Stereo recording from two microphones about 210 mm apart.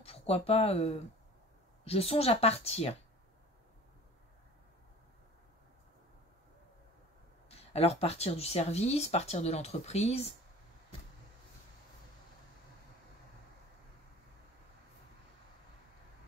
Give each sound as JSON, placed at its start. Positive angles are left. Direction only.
{"t": 0.0, "sound": "speech", "side_deg": 30}
{"t": 7.4, "sound": "speech", "side_deg": 30}